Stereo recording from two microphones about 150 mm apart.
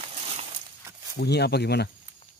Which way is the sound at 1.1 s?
90° left.